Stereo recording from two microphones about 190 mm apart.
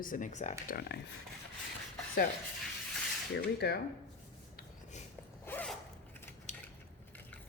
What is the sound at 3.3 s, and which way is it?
Speech, 60° left (ahead or behind).